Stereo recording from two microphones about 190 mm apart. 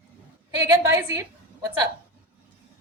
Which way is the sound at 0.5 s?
15° right (ahead or behind).